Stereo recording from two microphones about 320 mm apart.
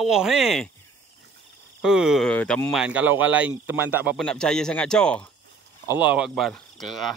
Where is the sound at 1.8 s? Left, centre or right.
Centre.